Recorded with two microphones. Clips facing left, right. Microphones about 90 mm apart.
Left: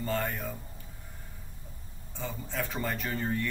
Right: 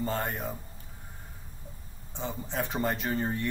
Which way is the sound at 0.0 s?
25° right (ahead or behind).